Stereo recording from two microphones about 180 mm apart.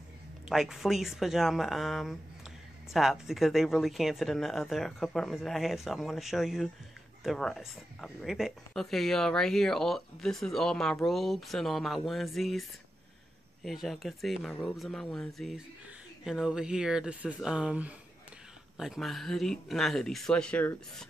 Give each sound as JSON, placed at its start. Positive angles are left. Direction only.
{"t": 0.5, "sound": "speech", "side_deg": 0}
{"t": 13.7, "sound": "speech", "side_deg": 0}